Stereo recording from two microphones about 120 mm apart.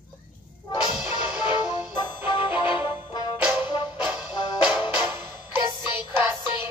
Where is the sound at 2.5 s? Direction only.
15° right (ahead or behind).